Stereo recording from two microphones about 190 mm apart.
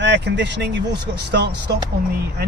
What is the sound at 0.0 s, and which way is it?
Speech, 65° right (ahead or behind).